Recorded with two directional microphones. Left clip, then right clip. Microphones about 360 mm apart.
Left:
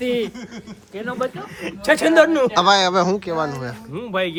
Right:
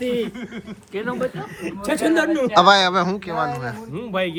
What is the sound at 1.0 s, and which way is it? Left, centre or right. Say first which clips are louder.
Speech: right 1 dB; centre.